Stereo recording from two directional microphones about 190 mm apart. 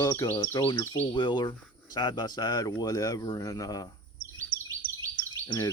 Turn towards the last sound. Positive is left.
turn(degrees=25)  # may be behind; listen again after turning